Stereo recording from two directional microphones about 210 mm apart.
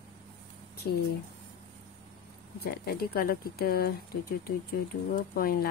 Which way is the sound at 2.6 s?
45° left (ahead or behind).